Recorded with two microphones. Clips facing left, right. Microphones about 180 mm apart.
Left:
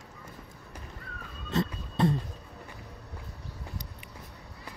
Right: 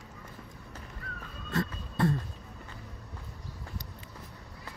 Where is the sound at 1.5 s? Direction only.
20° left (ahead or behind).